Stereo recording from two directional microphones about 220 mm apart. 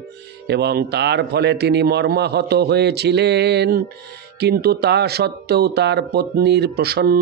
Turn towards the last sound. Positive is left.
turn(degrees=-45)  # may be behind; listen again after turning